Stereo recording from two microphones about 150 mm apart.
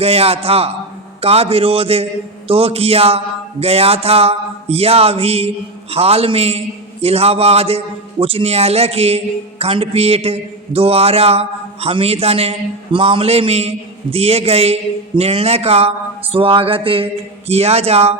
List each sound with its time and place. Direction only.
0.0 s a man's voice: 40° right (ahead or behind)